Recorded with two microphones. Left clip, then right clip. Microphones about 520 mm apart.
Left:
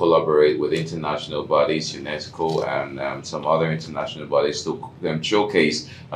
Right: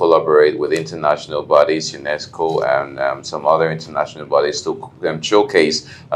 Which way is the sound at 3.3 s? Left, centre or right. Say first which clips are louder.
Right 5 dB; right.